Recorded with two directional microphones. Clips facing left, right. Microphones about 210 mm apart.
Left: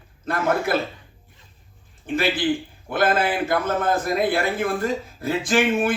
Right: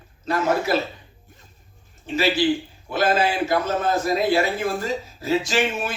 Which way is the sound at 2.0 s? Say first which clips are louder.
Right 2 dB; 55° left (ahead or behind).